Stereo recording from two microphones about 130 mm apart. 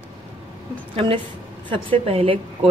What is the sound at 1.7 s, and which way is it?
Speech, 45° right (ahead or behind).